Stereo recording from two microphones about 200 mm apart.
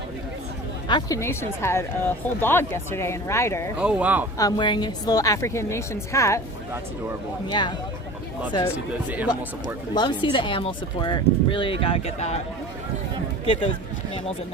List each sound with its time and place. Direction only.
0.9 s speech: 20° left (ahead or behind)
3.8 s speech: 5° right (ahead or behind)
4.4 s speech: 20° left (ahead or behind)
7.4 s speech: 20° left (ahead or behind)
9.0 s speech: 10° right (ahead or behind)
9.9 s speech: 20° left (ahead or behind)
13.4 s speech: 25° left (ahead or behind)